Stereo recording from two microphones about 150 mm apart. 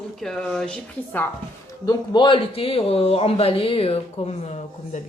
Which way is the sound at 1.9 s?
30° left (ahead or behind).